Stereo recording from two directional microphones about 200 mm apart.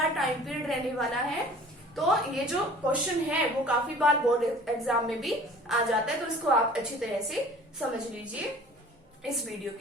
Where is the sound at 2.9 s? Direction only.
5° right (ahead or behind).